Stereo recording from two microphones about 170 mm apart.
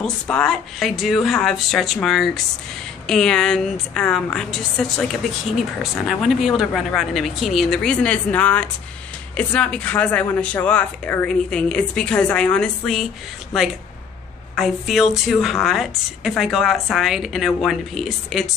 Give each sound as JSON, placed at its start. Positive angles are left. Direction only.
{"t": 0.0, "sound": "a woman's voice", "side_deg": 5}
{"t": 14.5, "sound": "a woman's voice", "side_deg": 0}